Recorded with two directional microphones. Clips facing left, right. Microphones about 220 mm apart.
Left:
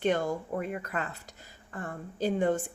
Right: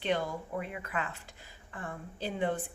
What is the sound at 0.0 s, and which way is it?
A woman's voice, 45° left (ahead or behind).